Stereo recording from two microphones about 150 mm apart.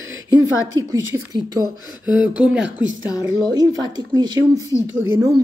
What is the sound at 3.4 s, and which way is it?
Speech, 25° right (ahead or behind).